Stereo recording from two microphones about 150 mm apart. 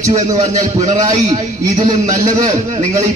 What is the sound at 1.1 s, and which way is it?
A man's voice, 30° right (ahead or behind).